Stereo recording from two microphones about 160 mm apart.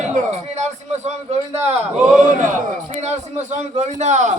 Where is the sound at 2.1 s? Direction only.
55° right (ahead or behind).